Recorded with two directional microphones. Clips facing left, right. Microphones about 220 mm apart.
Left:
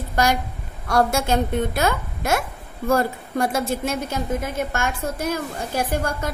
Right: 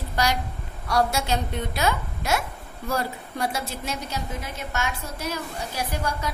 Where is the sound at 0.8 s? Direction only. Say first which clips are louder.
Left 4 dB; 50° left (ahead or behind).